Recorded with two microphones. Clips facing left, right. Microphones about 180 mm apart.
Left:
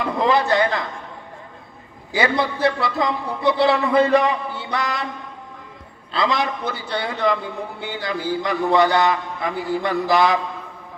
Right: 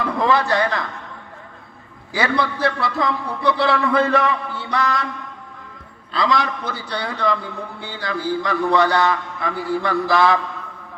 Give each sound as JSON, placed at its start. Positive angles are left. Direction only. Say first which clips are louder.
{"t": 0.0, "sound": "a man's voice", "louder": "even", "side_deg": 20}
{"t": 2.1, "sound": "a man's voice", "louder": "left 1 dB", "side_deg": 20}
{"t": 6.1, "sound": "a man's voice", "louder": "right 1 dB", "side_deg": 20}